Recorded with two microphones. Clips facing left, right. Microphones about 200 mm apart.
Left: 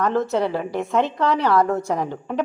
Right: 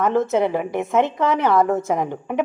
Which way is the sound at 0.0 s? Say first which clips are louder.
Right 2 dB; 20° right (ahead or behind).